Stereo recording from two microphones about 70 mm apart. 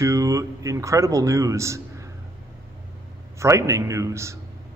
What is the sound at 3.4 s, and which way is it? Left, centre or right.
Speech, right.